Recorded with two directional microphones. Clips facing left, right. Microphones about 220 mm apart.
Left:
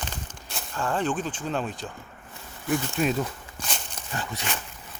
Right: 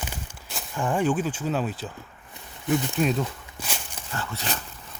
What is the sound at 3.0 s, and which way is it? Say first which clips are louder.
Speech: even; centre (ahead or behind).